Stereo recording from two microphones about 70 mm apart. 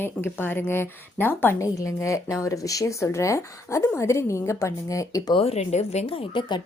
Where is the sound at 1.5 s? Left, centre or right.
Left.